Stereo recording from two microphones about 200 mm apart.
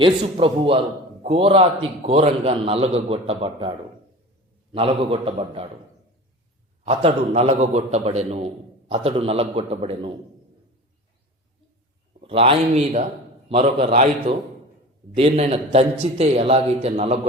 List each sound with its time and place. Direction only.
0.0 s a man's voice: 25° right (ahead or behind)
6.8 s a man's voice: 30° right (ahead or behind)
12.2 s a man's voice: 25° right (ahead or behind)